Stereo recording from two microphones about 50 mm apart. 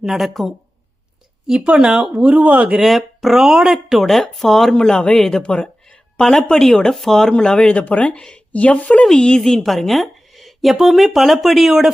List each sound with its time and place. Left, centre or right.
0.0 s a woman's voice: centre
1.5 s speech: centre
2.1 s speech: right
2.8 s a woman's voice: centre
5.4 s a woman's voice: left; by 11.9 s centre